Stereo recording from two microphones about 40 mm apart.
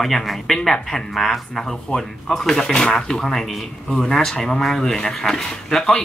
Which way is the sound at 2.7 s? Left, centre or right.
Centre.